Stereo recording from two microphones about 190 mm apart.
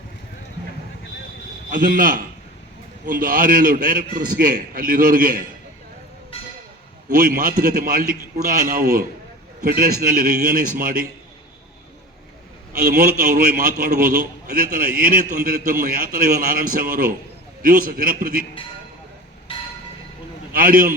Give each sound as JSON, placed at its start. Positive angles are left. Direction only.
{"t": 1.7, "sound": "a man's voice", "side_deg": -45}
{"t": 7.1, "sound": "a man's voice", "side_deg": -50}
{"t": 12.9, "sound": "a man's voice", "side_deg": -45}
{"t": 20.5, "sound": "a man's voice", "side_deg": -50}